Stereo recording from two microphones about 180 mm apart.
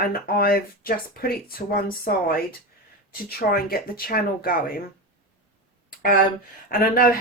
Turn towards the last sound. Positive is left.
turn(degrees=55)  # may be behind; listen again after turning